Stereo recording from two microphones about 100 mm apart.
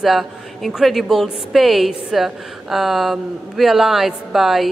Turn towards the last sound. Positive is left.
turn(degrees=0)  # may be behind; listen again after turning